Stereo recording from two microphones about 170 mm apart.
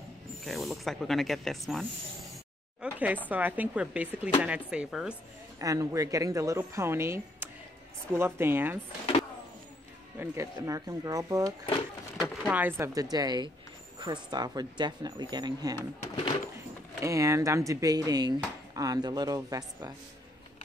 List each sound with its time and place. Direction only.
0.4 s speech: centre (ahead or behind)
2.8 s a sound: 10° right (ahead or behind)
3.3 s speech: 10° right (ahead or behind)
5.6 s speech: 20° right (ahead or behind)
10.1 s speech: 15° right (ahead or behind)
11.6 s speech: 30° left (ahead or behind)
12.4 s speech: 10° right (ahead or behind)
17.0 s speech: 20° right (ahead or behind)